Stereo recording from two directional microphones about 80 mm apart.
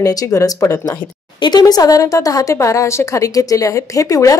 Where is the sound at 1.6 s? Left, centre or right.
Left.